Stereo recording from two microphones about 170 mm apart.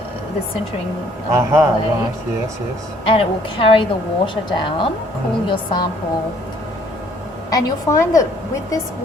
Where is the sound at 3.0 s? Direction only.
30° left (ahead or behind).